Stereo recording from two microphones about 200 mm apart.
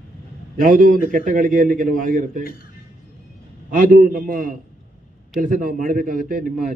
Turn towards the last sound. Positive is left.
turn(degrees=-45)  # may be behind; listen again after turning